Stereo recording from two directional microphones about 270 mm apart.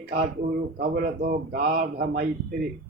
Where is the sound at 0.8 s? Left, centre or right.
Right.